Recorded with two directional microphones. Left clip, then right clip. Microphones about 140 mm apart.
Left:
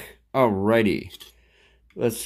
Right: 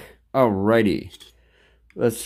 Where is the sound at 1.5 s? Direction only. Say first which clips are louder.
Right 2 dB; 25° right (ahead or behind).